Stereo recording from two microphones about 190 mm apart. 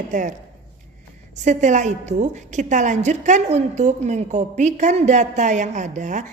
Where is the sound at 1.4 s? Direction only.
40° right (ahead or behind).